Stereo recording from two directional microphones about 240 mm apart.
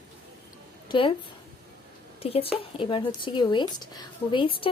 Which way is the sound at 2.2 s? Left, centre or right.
Left.